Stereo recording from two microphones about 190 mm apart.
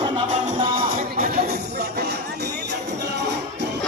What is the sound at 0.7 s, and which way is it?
Music, 50° right (ahead or behind).